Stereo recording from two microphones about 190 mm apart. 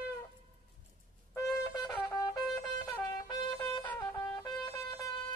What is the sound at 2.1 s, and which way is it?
Trumpet, 15° left (ahead or behind).